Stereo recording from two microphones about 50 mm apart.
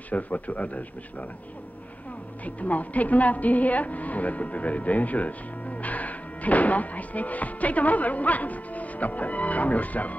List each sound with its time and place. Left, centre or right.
0.1 s a man's voice: left
2.4 s a woman's voice: left